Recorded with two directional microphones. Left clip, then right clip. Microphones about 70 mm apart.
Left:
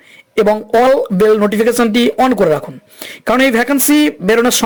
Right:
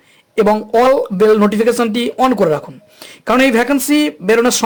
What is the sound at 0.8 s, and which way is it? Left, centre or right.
Speech, left.